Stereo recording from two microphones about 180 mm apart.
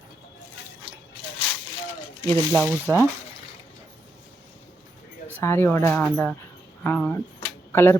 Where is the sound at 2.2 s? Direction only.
15° left (ahead or behind).